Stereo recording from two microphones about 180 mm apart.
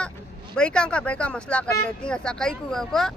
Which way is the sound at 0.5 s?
5° left (ahead or behind).